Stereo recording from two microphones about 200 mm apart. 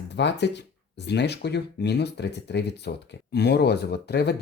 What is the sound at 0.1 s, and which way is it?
Speech, 60° left (ahead or behind).